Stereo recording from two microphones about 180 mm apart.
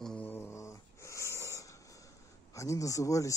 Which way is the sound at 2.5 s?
15° left (ahead or behind).